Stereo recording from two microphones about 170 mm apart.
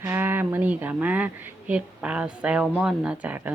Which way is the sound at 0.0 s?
15° right (ahead or behind).